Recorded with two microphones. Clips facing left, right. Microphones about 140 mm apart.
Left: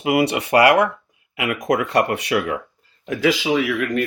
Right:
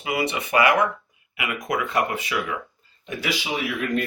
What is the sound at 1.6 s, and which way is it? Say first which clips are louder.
Speech: left 5 dB; 90° left.